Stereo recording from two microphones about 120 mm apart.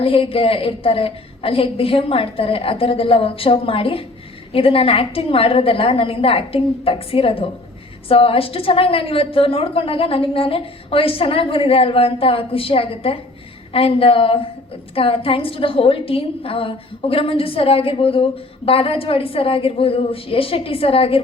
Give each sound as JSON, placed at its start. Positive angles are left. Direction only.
{"t": 0.0, "sound": "a woman's voice", "side_deg": 50}